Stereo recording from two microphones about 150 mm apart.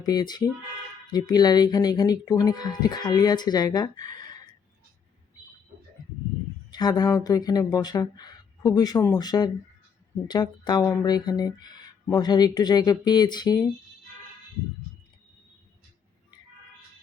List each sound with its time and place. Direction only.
0.0 s speech: 25° left (ahead or behind)
6.7 s speech: 25° left (ahead or behind)